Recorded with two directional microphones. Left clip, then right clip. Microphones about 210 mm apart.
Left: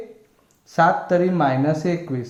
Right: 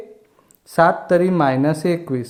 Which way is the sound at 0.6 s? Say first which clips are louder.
Right 2 dB; 40° right (ahead or behind).